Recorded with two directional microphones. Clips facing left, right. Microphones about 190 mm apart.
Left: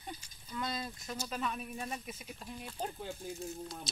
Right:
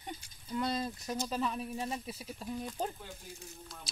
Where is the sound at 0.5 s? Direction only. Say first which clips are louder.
Right 5 dB; 35° right (ahead or behind).